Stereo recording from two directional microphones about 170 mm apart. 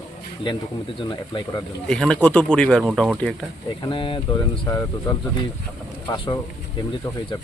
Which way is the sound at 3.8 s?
30° left (ahead or behind).